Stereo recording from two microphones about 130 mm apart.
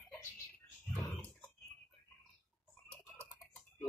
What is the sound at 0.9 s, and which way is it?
Typing, 5° left (ahead or behind).